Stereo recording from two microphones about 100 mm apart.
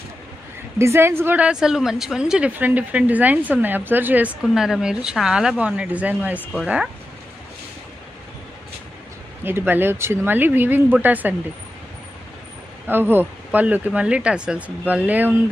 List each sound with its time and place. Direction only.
0.8 s speech: 25° right (ahead or behind)
1.5 s speech: 5° right (ahead or behind)
4.5 s speech: 5° right (ahead or behind)
9.4 s speech: 20° right (ahead or behind)
12.9 s speech: 20° right (ahead or behind)